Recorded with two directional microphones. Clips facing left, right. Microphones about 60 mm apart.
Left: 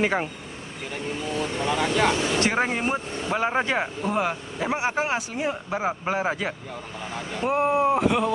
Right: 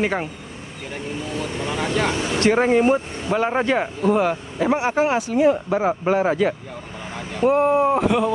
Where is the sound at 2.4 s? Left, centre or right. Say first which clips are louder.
Right 7 dB; centre.